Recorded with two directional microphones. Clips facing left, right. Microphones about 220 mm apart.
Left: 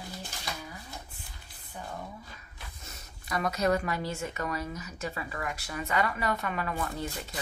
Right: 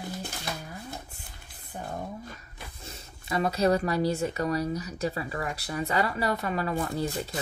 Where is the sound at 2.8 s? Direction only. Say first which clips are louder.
Right 4 dB; 30° right (ahead or behind).